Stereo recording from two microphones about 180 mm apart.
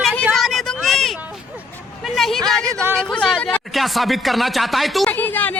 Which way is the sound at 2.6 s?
15° right (ahead or behind).